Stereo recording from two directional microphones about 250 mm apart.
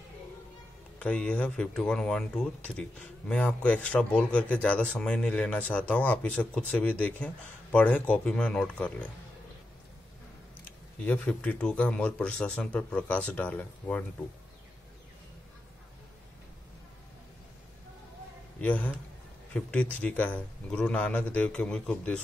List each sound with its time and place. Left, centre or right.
0.9 s speech: centre
11.1 s speech: centre
18.6 s a man's voice: centre